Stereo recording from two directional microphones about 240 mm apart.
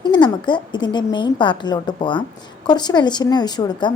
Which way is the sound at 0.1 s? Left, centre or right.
Centre.